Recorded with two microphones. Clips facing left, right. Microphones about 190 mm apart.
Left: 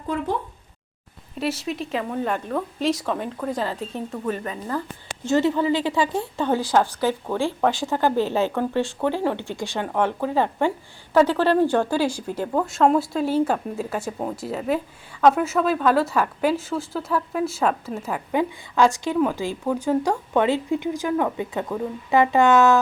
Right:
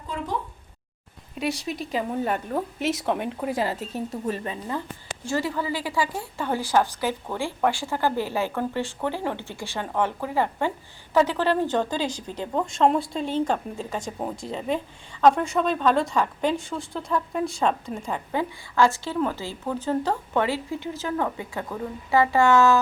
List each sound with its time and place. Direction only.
1.4 s speech: centre (ahead or behind)
2.5 s a woman's voice: 25° right (ahead or behind)
3.2 s speech: 10° right (ahead or behind)
5.2 s a woman's voice: 20° left (ahead or behind)
6.7 s speech: 15° right (ahead or behind)
7.7 s a woman's voice: 20° left (ahead or behind)
11.3 s speech: 15° right (ahead or behind)
11.6 s a woman's voice: 10° left (ahead or behind)